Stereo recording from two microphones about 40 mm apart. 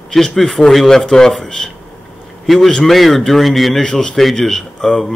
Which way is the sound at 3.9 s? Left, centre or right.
Centre.